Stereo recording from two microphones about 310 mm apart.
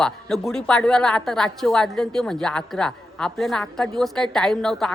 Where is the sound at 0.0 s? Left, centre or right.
Centre.